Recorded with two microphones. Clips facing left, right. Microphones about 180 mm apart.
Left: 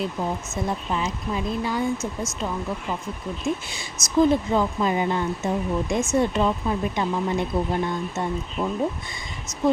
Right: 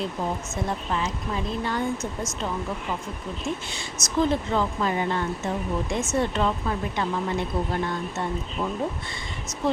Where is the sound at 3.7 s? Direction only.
10° left (ahead or behind).